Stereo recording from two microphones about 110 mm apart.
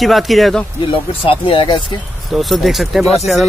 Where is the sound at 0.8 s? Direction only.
55° left (ahead or behind).